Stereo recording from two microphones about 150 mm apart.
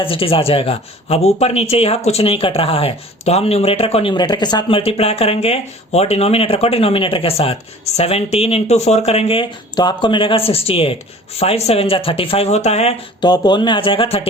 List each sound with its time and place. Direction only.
0.0 s speech: 35° left (ahead or behind)
4.8 s speech: 40° left (ahead or behind)
13.2 s speech: 30° left (ahead or behind)